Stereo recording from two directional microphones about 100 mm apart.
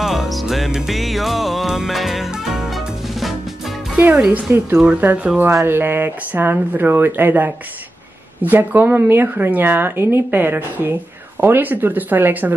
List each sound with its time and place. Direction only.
0.0 s music: centre (ahead or behind)
3.9 s speech: 10° right (ahead or behind)
4.5 s a woman's voice: 25° right (ahead or behind)